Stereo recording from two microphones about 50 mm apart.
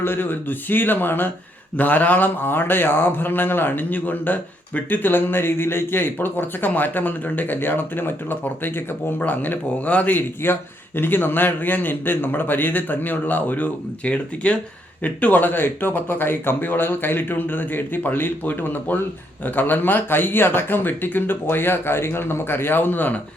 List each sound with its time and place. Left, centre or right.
0.0 s speech: left
10.2 s speech: left